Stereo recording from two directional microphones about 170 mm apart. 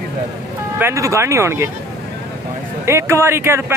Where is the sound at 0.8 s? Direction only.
15° right (ahead or behind).